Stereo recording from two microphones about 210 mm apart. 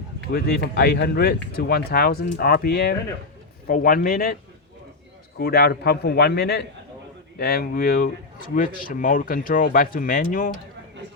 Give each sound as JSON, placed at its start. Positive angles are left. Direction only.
{"t": 0.3, "sound": "a man's voice", "side_deg": 50}
{"t": 5.4, "sound": "a man's voice", "side_deg": 50}